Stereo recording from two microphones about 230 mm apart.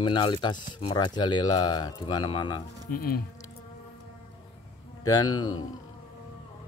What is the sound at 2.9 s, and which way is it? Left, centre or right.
Speech, left.